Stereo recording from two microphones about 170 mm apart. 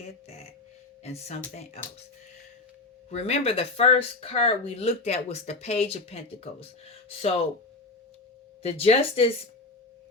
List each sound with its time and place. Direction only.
1.0 s speech: 40° left (ahead or behind)
3.1 s speech: 40° left (ahead or behind)
8.6 s speech: 35° left (ahead or behind)